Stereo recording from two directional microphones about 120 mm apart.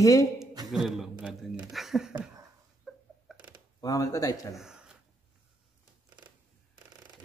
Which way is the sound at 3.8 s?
30° left (ahead or behind).